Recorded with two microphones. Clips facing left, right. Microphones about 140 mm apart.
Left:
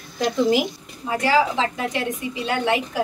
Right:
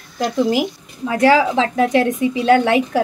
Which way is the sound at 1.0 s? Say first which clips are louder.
Right 6 dB; 90° right.